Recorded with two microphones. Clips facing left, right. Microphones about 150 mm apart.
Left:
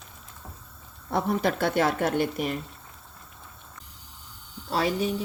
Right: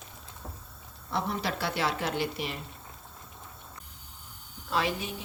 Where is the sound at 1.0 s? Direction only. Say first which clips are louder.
Left 6 dB; 50° left (ahead or behind).